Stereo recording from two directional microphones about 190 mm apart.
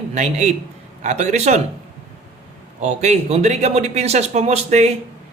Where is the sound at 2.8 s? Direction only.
35° right (ahead or behind).